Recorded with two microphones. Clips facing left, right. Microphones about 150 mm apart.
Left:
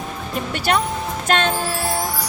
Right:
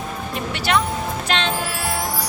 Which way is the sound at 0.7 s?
45° left (ahead or behind).